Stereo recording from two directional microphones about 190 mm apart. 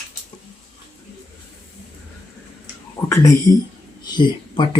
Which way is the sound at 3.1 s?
15° left (ahead or behind).